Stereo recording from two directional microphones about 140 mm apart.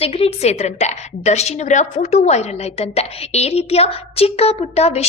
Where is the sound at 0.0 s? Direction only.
45° left (ahead or behind).